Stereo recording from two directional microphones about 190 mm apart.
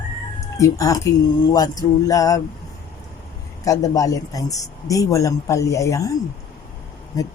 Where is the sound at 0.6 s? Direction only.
15° left (ahead or behind).